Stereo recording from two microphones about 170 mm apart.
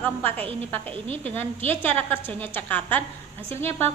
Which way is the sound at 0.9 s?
35° right (ahead or behind).